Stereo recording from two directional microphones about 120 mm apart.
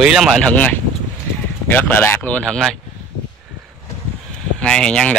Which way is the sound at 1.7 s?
15° left (ahead or behind).